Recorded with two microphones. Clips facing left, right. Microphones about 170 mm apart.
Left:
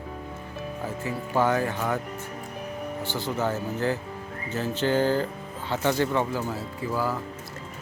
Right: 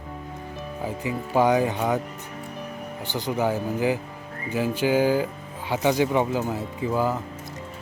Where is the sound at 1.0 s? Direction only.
15° right (ahead or behind).